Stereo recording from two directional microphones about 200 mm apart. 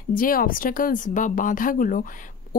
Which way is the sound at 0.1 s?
45° left (ahead or behind).